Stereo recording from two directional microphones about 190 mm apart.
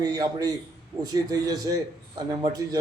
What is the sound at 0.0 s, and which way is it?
A man's voice, 20° right (ahead or behind).